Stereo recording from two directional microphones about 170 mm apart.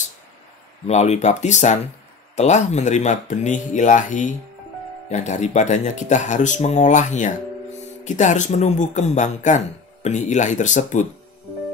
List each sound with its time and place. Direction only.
0.8 s speech: 40° left (ahead or behind)